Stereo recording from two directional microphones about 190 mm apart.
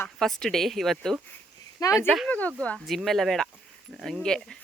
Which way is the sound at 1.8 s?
15° left (ahead or behind).